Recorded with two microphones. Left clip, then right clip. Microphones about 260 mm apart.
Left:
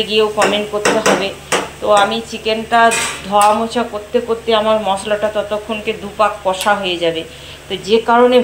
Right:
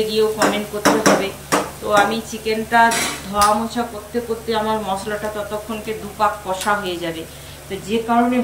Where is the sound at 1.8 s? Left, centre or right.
Centre.